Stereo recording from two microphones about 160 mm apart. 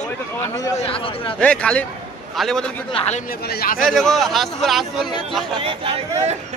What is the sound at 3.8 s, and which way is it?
A man's voice, centre (ahead or behind).